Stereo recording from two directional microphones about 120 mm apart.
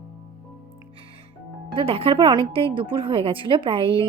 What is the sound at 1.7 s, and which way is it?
A woman's voice, 50° right (ahead or behind).